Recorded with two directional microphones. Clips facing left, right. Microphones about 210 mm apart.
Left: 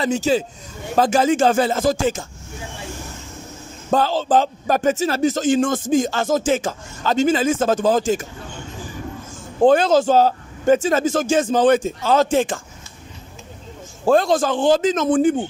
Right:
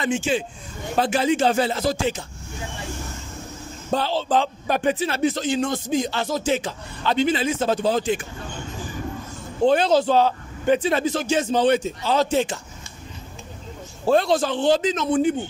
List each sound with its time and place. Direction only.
0.0 s a man's voice: 40° left (ahead or behind)
3.9 s a man's voice: 45° left (ahead or behind)
9.6 s a man's voice: 50° left (ahead or behind)
14.0 s a man's voice: 45° left (ahead or behind)